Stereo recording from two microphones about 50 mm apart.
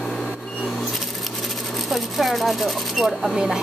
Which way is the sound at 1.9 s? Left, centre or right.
Centre.